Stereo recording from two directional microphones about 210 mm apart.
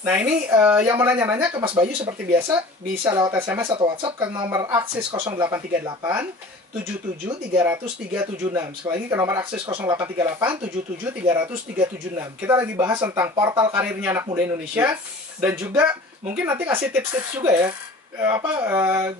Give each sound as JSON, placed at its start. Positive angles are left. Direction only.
{"t": 0.0, "sound": "speech", "side_deg": -10}
{"t": 7.5, "sound": "speech", "side_deg": -10}
{"t": 12.2, "sound": "speech", "side_deg": -10}